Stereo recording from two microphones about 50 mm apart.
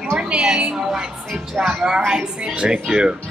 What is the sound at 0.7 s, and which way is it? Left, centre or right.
A woman's voice, centre.